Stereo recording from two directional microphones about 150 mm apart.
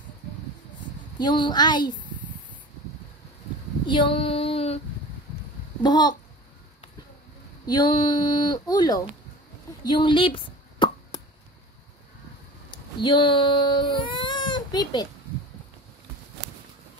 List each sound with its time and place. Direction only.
0.7 s speech: 30° left (ahead or behind)
3.8 s child singing: 35° left (ahead or behind)
5.8 s a child's voice: 30° left (ahead or behind)
7.6 s speech: 25° left (ahead or behind)
9.8 s a sound: 30° left (ahead or behind)
12.7 s speech: 30° left (ahead or behind)